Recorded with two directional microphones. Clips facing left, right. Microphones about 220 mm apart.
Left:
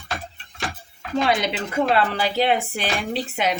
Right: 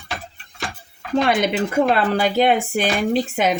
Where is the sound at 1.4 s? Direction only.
50° right (ahead or behind).